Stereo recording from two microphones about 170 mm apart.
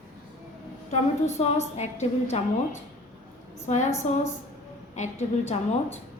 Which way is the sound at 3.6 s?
45° left (ahead or behind).